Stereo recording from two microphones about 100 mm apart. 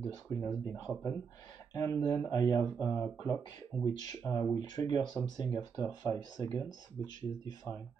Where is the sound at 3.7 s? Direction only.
20° left (ahead or behind).